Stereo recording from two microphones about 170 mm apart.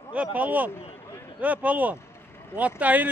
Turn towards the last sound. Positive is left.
turn(degrees=-10)  # may be behind; listen again after turning